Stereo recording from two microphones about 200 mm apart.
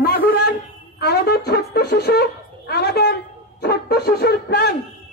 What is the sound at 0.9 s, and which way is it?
Speech, 55° left (ahead or behind).